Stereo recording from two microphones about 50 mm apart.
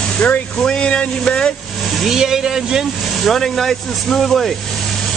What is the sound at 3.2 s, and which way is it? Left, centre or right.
Speech, centre.